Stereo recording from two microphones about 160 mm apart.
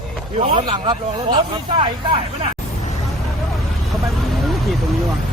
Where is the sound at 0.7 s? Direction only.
30° right (ahead or behind).